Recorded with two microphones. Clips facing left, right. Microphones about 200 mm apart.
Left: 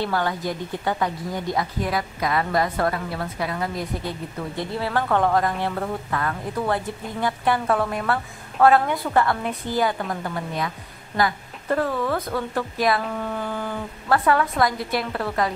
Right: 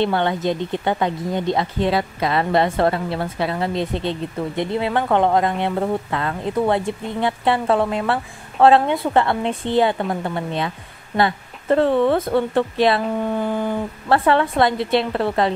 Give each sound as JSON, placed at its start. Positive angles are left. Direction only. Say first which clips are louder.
{"t": 0.0, "sound": "speech", "louder": "right 5 dB", "side_deg": -25}